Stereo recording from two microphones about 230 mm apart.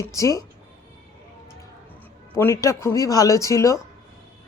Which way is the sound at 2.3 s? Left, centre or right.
Centre.